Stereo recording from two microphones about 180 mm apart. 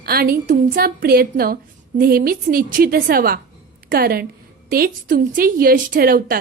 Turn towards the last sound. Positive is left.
turn(degrees=-55)  # may be behind; listen again after turning